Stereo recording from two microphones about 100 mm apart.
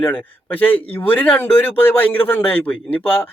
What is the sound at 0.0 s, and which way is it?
A man's voice, 20° left (ahead or behind).